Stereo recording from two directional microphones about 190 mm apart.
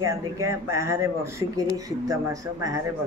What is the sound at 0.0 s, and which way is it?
Speech, 15° right (ahead or behind).